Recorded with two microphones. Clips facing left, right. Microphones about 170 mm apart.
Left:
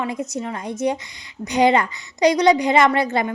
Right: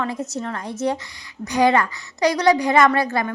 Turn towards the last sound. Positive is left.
turn(degrees=20)  # may be behind; listen again after turning